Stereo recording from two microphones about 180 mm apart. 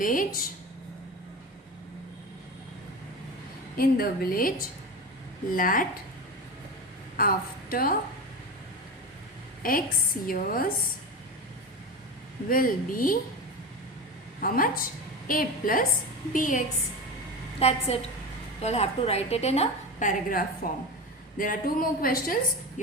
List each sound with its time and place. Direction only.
0.0 s a woman's voice: 50° left (ahead or behind)
3.8 s a woman's voice: 55° left (ahead or behind)
7.2 s a woman's voice: 55° left (ahead or behind)
9.6 s a woman's voice: 55° left (ahead or behind)
12.5 s a woman's voice: 50° left (ahead or behind)
14.4 s a woman's voice: 50° left (ahead or behind)
17.6 s a woman's voice: 35° left (ahead or behind); by 22.4 s 50° left (ahead or behind)